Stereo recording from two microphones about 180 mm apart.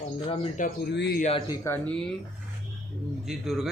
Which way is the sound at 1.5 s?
10° left (ahead or behind).